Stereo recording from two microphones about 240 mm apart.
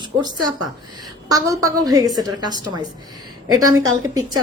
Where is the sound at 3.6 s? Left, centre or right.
Right.